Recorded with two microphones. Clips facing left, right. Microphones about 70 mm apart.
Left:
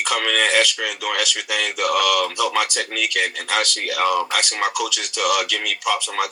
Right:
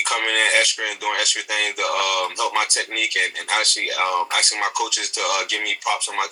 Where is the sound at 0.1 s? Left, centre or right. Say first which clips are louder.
Left 1 dB; right.